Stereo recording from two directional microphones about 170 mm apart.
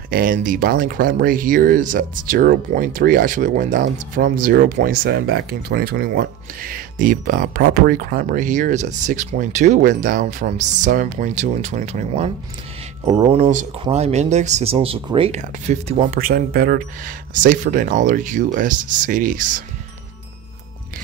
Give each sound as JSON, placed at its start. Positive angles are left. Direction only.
{"t": 0.1, "sound": "speech", "side_deg": -55}
{"t": 15.3, "sound": "speech", "side_deg": -45}
{"t": 16.2, "sound": "speech", "side_deg": -60}